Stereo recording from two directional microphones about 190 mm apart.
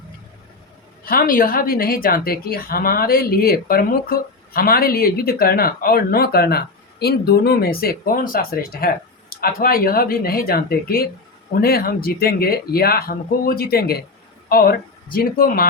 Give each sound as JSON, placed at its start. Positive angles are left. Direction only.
{"t": 1.0, "sound": "a woman's voice", "side_deg": 50}